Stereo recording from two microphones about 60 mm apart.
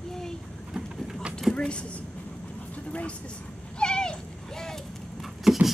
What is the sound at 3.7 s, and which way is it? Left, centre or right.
Cat, centre.